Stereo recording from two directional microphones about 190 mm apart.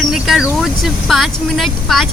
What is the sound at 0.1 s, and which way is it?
Speech, 5° right (ahead or behind).